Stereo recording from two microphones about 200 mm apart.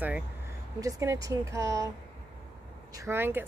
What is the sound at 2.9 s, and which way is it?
Speech, 15° right (ahead or behind).